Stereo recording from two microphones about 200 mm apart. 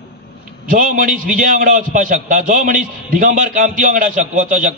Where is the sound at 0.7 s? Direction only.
45° right (ahead or behind).